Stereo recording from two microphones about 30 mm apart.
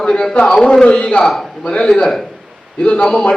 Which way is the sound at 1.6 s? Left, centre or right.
Left.